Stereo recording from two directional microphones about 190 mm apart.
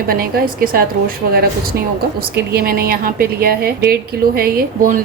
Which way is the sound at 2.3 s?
55° right (ahead or behind).